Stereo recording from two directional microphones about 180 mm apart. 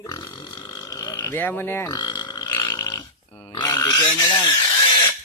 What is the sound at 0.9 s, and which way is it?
Speech, 20° left (ahead or behind).